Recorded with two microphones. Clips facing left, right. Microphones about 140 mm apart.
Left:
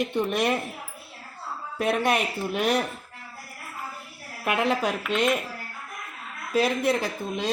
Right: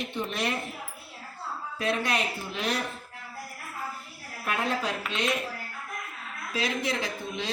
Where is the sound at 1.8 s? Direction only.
55° left (ahead or behind).